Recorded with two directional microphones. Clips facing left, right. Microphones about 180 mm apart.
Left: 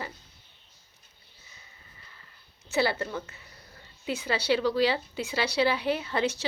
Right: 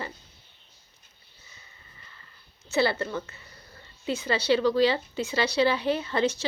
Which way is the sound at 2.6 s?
10° left (ahead or behind).